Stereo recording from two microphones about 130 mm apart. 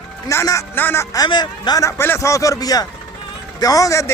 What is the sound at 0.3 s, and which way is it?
Speech, 25° left (ahead or behind).